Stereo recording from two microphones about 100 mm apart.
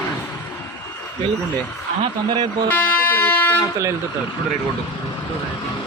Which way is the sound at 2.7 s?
15° left (ahead or behind).